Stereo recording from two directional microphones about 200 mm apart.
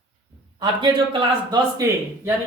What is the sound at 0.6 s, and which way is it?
A man's voice, 25° right (ahead or behind).